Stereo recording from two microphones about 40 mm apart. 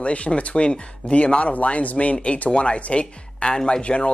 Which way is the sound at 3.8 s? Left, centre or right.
Left.